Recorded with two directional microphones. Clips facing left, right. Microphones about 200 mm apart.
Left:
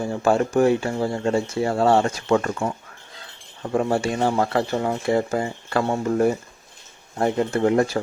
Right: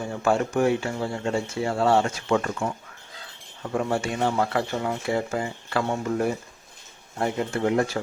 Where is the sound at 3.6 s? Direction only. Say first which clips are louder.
Left 4 dB; 35° left (ahead or behind).